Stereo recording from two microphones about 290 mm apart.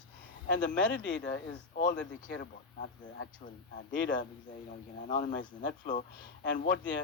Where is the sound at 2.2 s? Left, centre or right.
Left.